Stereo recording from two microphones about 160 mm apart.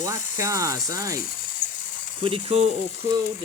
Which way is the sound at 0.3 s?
20° right (ahead or behind).